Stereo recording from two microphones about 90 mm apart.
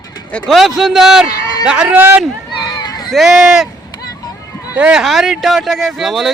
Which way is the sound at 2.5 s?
55° left (ahead or behind).